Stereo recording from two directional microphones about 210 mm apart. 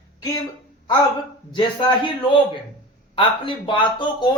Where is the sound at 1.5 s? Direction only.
25° left (ahead or behind).